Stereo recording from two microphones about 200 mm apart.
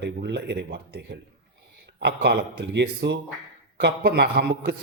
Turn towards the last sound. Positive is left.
turn(degrees=-55)  # may be behind; listen again after turning